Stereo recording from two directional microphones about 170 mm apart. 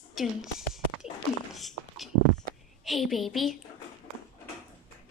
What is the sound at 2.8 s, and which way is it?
Speech, centre (ahead or behind).